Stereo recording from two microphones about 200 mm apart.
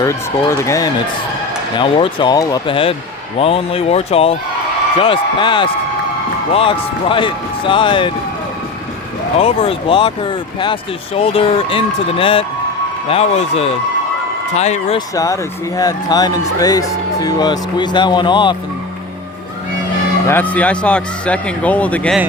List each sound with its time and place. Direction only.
0.6 s speech: 15° left (ahead or behind)
9.4 s a man's voice: 30° left (ahead or behind)
15.1 s speech: 15° left (ahead or behind)
20.2 s speech: 10° left (ahead or behind)